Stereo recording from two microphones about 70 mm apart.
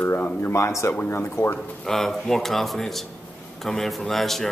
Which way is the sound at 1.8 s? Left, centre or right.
Centre.